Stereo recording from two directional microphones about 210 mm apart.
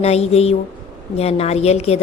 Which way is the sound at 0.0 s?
30° left (ahead or behind).